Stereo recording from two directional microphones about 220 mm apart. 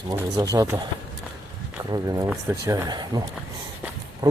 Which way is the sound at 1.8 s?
15° right (ahead or behind).